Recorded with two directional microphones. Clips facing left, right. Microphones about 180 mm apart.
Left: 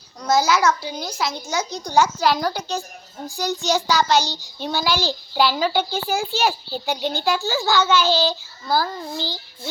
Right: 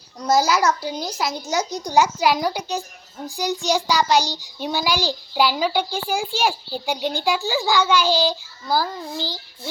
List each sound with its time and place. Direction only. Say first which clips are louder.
0.3 s a child's voice: even; 35° right (ahead or behind)
1.8 s a child's voice: even; 15° right (ahead or behind)